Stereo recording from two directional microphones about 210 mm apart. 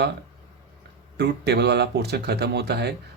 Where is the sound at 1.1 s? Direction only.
55° right (ahead or behind).